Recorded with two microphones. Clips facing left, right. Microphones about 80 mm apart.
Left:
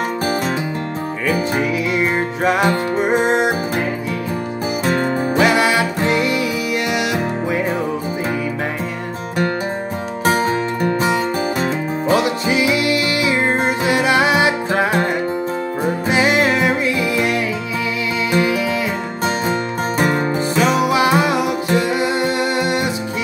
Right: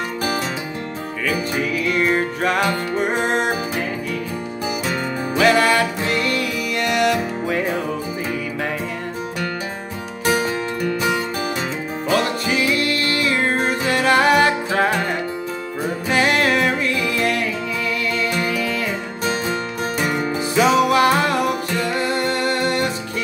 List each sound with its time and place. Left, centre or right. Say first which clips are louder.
1.6 s music: left 2 dB; centre
5.4 s music: right 1 dB; centre
10.2 s music: left 3 dB; left
12.2 s music: left 3 dB; centre
16.1 s music: left 1 dB; centre
19.2 s music: left 3 dB; left
20.5 s music: right 2 dB; centre